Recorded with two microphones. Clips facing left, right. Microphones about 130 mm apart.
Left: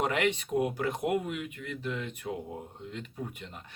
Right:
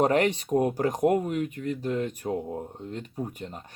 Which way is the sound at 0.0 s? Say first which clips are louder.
Right 6 dB; 40° right (ahead or behind).